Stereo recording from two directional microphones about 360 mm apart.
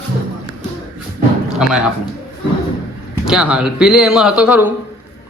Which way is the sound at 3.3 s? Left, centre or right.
Centre.